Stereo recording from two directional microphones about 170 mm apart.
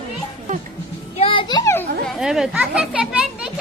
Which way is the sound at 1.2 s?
30° left (ahead or behind).